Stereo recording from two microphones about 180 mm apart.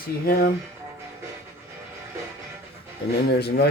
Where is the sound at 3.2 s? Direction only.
65° left (ahead or behind).